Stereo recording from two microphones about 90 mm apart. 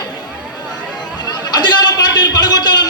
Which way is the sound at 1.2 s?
50° left (ahead or behind).